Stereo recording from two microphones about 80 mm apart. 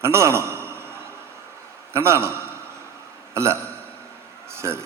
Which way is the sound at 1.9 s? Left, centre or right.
Right.